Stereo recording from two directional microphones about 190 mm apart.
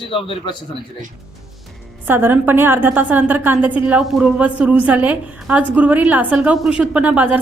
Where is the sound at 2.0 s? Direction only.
10° right (ahead or behind).